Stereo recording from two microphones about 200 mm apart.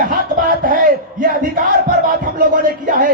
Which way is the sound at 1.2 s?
45° right (ahead or behind).